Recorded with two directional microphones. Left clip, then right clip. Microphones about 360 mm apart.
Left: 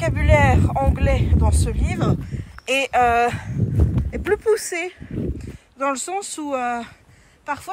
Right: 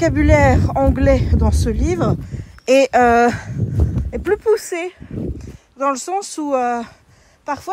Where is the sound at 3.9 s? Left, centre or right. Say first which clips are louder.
Right 3 dB; centre.